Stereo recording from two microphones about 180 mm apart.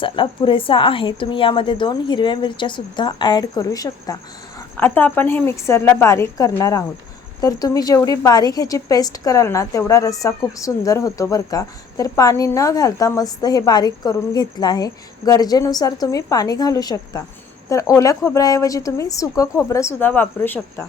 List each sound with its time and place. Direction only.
0.0 s a woman's voice: 30° left (ahead or behind); by 20.8 s 10° left (ahead or behind)